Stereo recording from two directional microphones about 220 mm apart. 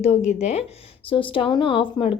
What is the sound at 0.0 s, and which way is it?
A woman's voice, 30° left (ahead or behind).